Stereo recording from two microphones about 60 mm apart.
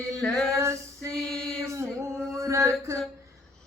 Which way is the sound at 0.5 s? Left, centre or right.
Right.